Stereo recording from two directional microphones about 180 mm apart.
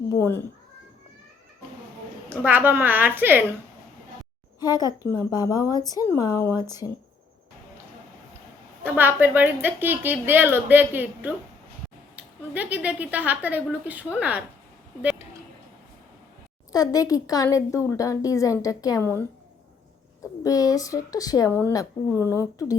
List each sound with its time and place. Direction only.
0.1 s speech: 15° left (ahead or behind)
2.3 s a woman's voice: 10° right (ahead or behind)
4.6 s a woman's voice: 20° left (ahead or behind)
8.8 s a woman's voice: 10° right (ahead or behind)
16.7 s a woman's voice: 20° left (ahead or behind)
20.4 s a woman's voice: 20° left (ahead or behind)